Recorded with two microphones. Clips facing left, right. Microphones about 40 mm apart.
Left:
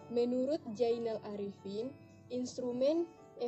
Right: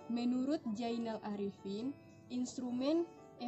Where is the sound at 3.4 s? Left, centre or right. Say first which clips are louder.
Left 6 dB; centre.